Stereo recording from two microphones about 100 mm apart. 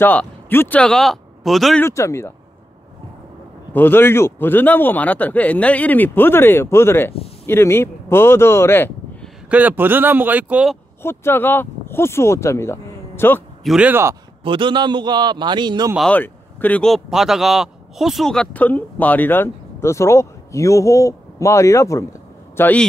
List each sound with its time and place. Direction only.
0.0 s speech: 20° left (ahead or behind)
0.8 s speech: 5° left (ahead or behind)
1.9 s speech: 30° left (ahead or behind)
3.7 s speech: 20° left (ahead or behind)
9.5 s speech: 15° right (ahead or behind)
11.0 s speech: 25° left (ahead or behind)
13.6 s speech: centre (ahead or behind)
14.4 s a man's voice: 55° right (ahead or behind)
16.1 s speech: 15° left (ahead or behind)
16.8 s speech: centre (ahead or behind); by 22.0 s 30° left (ahead or behind)
22.6 s a man's voice: 15° left (ahead or behind)